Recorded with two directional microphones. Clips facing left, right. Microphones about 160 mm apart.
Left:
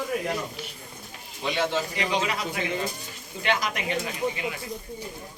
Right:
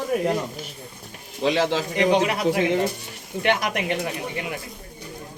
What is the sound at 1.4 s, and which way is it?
Speech, 90° right.